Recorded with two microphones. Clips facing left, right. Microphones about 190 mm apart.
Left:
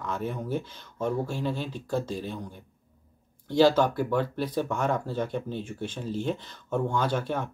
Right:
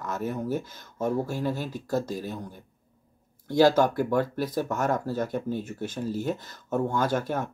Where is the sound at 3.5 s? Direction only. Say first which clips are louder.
Right 1 dB; 10° right (ahead or behind).